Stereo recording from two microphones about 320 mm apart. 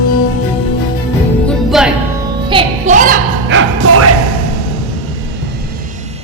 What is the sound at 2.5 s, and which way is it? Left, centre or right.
Music, centre.